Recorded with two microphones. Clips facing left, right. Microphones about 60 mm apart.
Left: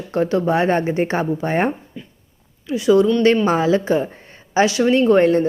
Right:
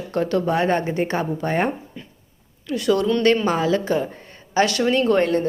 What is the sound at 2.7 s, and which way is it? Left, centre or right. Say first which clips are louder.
Speech: left 5 dB; centre.